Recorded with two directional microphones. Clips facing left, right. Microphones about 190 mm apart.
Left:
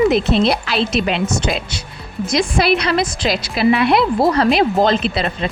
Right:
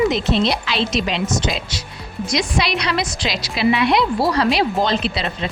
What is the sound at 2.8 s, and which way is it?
A woman's voice, 50° left (ahead or behind).